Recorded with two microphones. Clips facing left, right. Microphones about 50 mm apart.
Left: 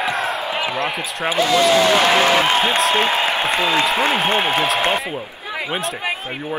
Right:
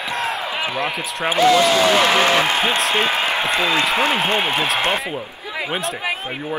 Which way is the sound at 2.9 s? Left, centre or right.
Left.